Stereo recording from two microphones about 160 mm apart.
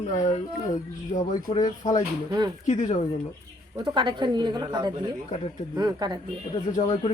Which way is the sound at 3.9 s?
30° right (ahead or behind).